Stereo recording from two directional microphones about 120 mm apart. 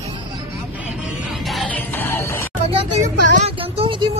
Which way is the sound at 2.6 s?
75° right (ahead or behind).